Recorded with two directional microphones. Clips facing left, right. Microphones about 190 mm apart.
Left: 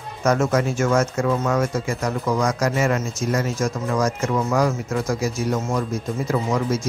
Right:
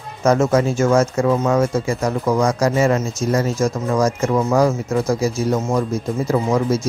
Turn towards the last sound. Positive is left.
turn(degrees=-30)  # may be behind; listen again after turning